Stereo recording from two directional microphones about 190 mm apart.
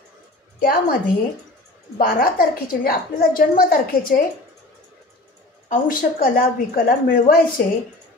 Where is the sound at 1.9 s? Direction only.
50° left (ahead or behind).